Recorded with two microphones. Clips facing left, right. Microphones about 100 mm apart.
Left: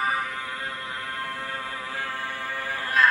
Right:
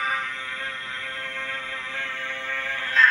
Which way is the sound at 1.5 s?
10° left (ahead or behind).